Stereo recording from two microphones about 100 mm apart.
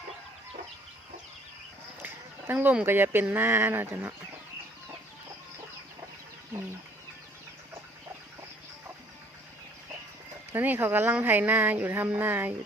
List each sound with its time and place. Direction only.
2.0 s a sound: 20° right (ahead or behind)
2.8 s speech: 20° right (ahead or behind)
10.5 s speech: 20° right (ahead or behind)